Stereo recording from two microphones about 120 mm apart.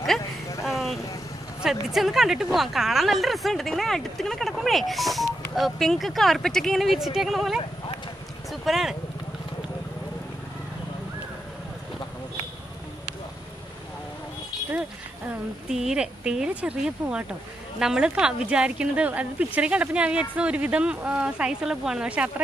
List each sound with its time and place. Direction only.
0.2 s vehicle: 25° left (ahead or behind)
0.7 s vehicle: centre (ahead or behind)
1.6 s speech: centre (ahead or behind)
8.5 s a sound: centre (ahead or behind)
15.7 s speech: 5° right (ahead or behind)